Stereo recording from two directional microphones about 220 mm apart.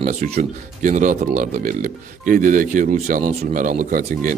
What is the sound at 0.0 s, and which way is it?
Speech, 35° right (ahead or behind).